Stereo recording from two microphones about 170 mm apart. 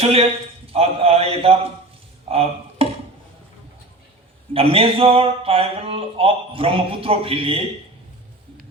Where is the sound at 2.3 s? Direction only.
35° right (ahead or behind).